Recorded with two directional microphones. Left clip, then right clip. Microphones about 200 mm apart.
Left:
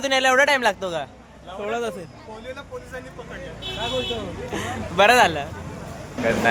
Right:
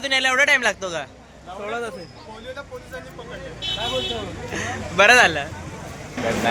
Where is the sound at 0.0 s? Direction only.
35° left (ahead or behind); by 1.0 s 20° left (ahead or behind).